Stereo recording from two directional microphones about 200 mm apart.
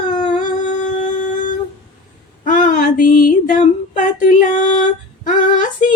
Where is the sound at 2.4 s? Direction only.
40° left (ahead or behind).